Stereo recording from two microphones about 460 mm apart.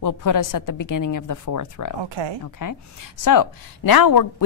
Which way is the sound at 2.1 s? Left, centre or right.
Right.